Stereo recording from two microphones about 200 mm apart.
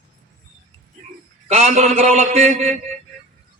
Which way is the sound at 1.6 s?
35° right (ahead or behind).